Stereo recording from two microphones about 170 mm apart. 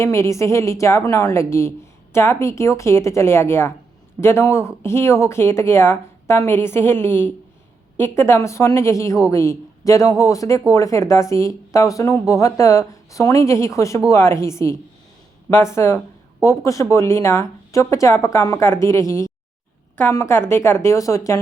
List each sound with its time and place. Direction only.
0.0 s speech: 15° left (ahead or behind)